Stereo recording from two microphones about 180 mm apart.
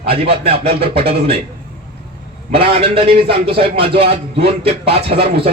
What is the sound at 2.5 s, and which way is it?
A man's voice, 30° right (ahead or behind).